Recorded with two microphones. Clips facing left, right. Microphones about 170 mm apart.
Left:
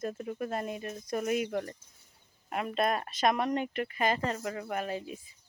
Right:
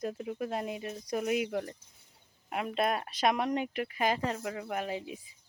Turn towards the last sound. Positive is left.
turn(degrees=-15)  # may be behind; listen again after turning